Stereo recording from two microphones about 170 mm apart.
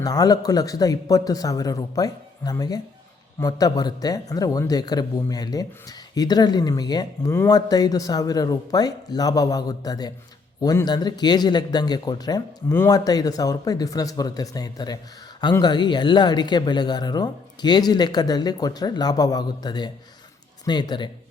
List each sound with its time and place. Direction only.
0.0 s speech: 20° left (ahead or behind)